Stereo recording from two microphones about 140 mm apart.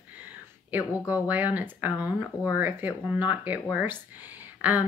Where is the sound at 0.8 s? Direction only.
20° left (ahead or behind).